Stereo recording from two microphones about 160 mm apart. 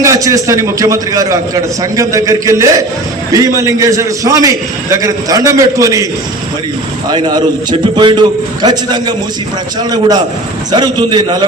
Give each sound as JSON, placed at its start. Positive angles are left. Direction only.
{"t": 0.0, "sound": "a man's voice", "side_deg": -20}
{"t": 7.1, "sound": "a man's voice", "side_deg": -30}